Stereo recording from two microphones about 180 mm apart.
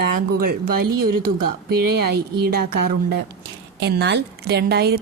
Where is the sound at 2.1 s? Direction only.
60° right (ahead or behind).